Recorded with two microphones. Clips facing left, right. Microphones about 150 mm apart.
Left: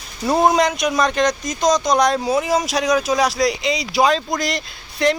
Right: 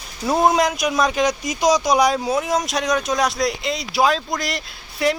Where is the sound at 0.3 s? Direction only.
Centre (ahead or behind).